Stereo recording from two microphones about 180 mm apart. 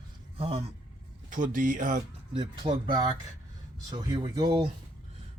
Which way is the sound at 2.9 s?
25° right (ahead or behind).